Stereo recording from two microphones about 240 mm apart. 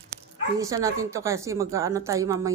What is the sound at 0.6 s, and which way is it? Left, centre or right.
A woman's voice, centre.